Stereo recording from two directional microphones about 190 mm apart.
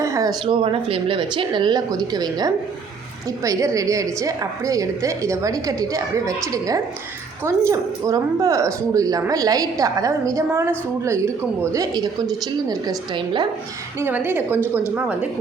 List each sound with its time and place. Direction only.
0.0 s a sound: 20° right (ahead or behind)
0.4 s a woman's voice: 30° right (ahead or behind)
14.0 s a woman's voice: 10° right (ahead or behind)